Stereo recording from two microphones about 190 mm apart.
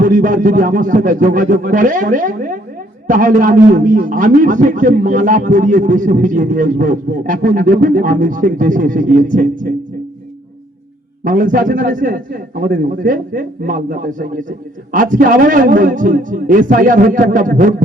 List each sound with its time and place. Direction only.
0.0 s a man's voice: 45° right (ahead or behind)
11.2 s a man's voice: 45° right (ahead or behind)